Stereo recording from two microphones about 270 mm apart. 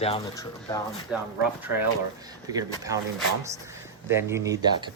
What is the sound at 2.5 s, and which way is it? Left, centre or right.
Speech, centre.